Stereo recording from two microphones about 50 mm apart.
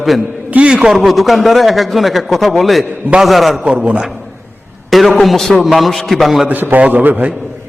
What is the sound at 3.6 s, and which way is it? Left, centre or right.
Speech, centre.